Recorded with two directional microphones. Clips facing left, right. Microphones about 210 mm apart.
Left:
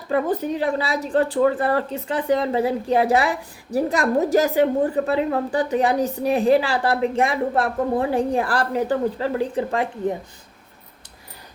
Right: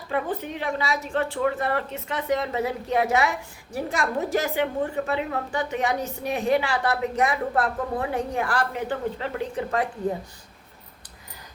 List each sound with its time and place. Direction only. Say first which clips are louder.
0.1 s speech: left 6 dB; 40° left (ahead or behind)